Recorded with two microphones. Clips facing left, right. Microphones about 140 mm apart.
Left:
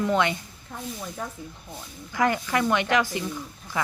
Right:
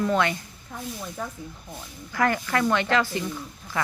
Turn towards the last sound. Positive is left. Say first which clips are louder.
# even
turn(degrees=10)  # may be behind; listen again after turning